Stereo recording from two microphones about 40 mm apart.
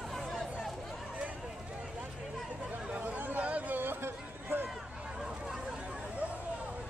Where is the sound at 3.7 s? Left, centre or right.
Right.